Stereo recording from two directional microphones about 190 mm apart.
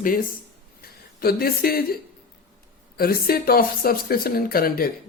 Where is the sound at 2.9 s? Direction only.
50° left (ahead or behind).